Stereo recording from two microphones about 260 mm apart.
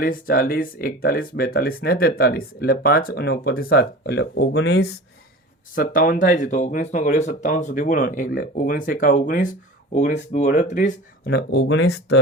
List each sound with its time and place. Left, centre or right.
0.0 s speech: left